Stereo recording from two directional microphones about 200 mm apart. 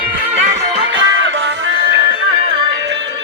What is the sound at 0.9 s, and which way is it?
Music, 70° right (ahead or behind).